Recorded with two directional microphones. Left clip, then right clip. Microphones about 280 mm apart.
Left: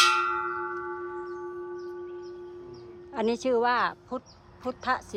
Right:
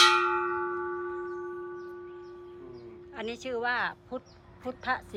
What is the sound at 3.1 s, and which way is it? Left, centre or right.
A man's voice, centre.